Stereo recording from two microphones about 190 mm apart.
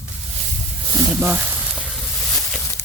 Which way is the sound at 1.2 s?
10° right (ahead or behind).